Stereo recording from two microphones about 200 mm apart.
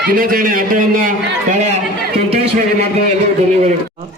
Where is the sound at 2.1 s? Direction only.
30° right (ahead or behind).